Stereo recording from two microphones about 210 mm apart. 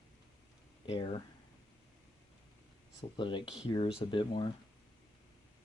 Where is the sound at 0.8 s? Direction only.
25° left (ahead or behind).